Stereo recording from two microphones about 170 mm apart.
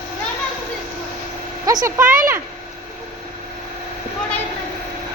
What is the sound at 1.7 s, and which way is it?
Speech, 20° right (ahead or behind).